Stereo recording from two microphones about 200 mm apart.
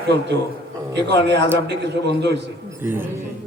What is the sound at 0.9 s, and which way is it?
A man's voice, 60° right (ahead or behind).